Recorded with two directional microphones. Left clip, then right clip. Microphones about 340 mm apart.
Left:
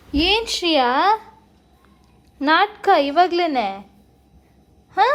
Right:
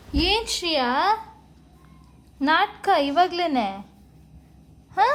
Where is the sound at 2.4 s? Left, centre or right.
Centre.